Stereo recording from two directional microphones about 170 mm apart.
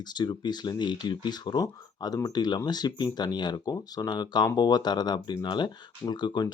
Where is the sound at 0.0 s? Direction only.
25° left (ahead or behind).